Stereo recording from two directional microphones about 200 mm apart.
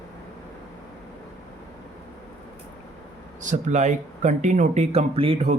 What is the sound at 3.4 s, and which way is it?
Speech, 35° right (ahead or behind).